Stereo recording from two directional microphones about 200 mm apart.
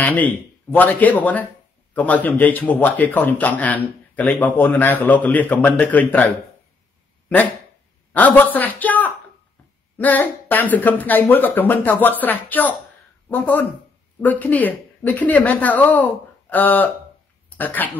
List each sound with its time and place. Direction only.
0.0 s speech: 10° left (ahead or behind)